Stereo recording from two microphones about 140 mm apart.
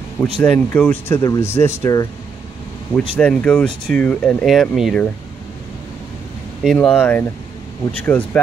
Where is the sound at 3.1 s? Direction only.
10° left (ahead or behind).